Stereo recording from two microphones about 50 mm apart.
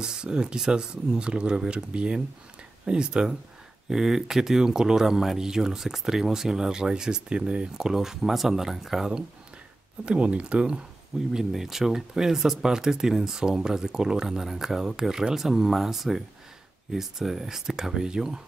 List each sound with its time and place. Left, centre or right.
0.0 s speech: centre
10.0 s speech: right